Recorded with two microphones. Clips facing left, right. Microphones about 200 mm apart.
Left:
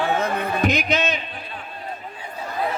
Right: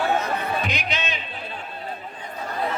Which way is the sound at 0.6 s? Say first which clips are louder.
Left 7 dB; 45° left (ahead or behind).